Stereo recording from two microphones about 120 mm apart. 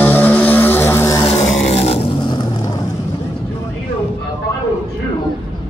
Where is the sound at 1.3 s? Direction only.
60° left (ahead or behind).